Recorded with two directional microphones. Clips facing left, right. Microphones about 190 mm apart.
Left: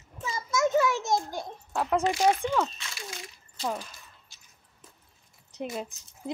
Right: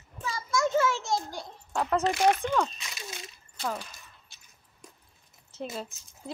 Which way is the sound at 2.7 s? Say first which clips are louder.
Left 1 dB; 20° right (ahead or behind).